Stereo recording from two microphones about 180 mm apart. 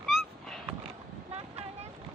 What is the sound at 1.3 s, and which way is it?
Boat, 35° right (ahead or behind).